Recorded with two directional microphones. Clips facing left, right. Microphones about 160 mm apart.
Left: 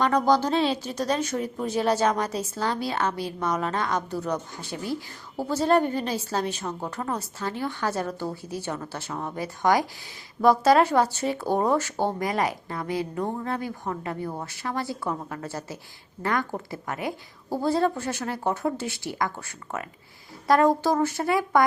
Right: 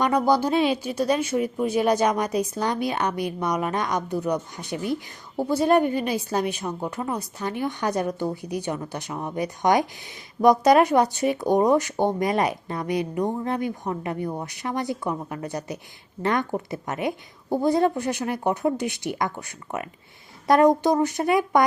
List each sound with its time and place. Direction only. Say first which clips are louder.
0.0 s speech: right 1 dB; 10° right (ahead or behind)